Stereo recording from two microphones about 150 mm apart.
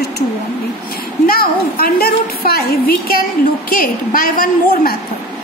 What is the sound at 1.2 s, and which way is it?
A woman's voice, 85° left.